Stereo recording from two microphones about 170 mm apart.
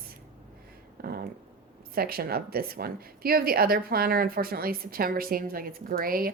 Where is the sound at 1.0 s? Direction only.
65° right (ahead or behind).